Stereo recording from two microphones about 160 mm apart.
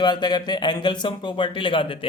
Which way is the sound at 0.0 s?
25° left (ahead or behind).